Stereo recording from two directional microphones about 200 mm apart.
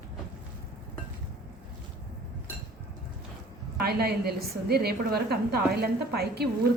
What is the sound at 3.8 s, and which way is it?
A woman's voice, 50° right (ahead or behind).